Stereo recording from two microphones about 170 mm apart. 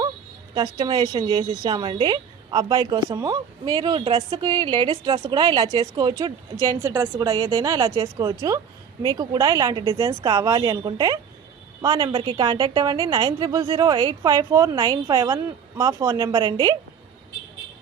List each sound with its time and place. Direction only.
0.5 s a woman's voice: 30° right (ahead or behind)